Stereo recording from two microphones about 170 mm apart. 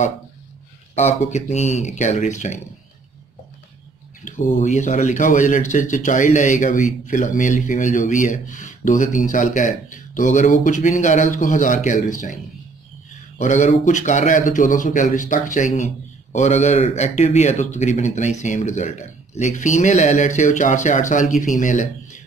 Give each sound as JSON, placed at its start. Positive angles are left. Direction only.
{"t": 0.9, "sound": "speech", "side_deg": 40}
{"t": 4.2, "sound": "speech", "side_deg": 45}
{"t": 13.4, "sound": "speech", "side_deg": 45}